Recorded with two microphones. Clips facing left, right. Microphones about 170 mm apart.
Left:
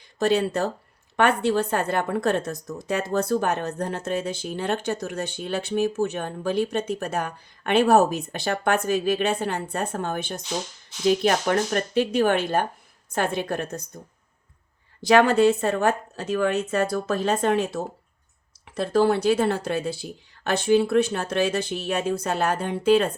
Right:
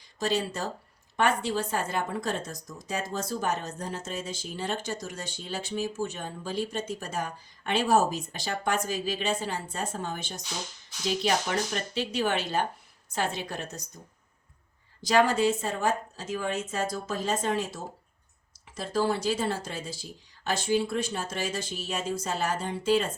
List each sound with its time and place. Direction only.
0.2 s speech: 60° left (ahead or behind)
15.0 s speech: 65° left (ahead or behind)